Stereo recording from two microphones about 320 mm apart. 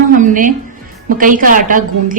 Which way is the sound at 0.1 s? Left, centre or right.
Right.